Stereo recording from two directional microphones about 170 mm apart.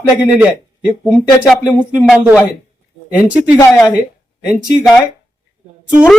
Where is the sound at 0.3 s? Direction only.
10° right (ahead or behind).